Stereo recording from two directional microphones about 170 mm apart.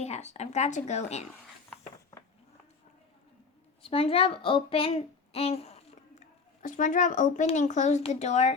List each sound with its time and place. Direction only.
0.0 s speech: 40° left (ahead or behind)
3.8 s a woman's voice: 35° left (ahead or behind)